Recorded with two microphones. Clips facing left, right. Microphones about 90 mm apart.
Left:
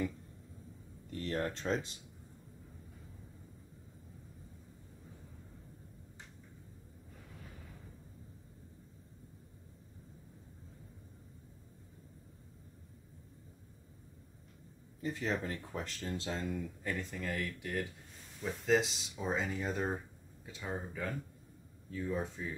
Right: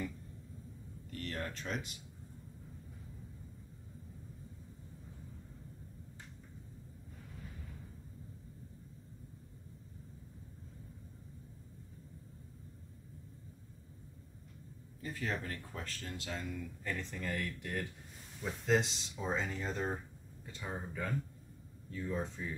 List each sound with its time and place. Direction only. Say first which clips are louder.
1.1 s speech: left 5 dB; 30° left (ahead or behind)
15.0 s speech: left 3 dB; 20° left (ahead or behind)
16.8 s speech: right 1 dB; 10° left (ahead or behind)